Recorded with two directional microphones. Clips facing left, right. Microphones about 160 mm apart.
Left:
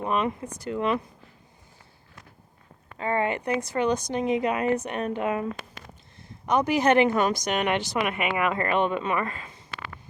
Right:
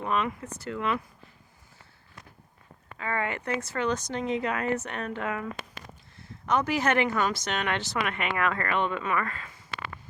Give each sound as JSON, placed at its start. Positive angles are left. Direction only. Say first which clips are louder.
{"t": 0.0, "sound": "speech", "louder": "left 3 dB", "side_deg": 20}
{"t": 3.0, "sound": "speech", "louder": "left 5 dB", "side_deg": 25}